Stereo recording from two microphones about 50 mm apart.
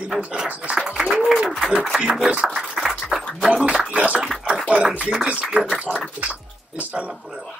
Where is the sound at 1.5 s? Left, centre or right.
Centre.